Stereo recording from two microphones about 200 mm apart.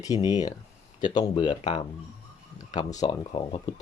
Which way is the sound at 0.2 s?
20° left (ahead or behind).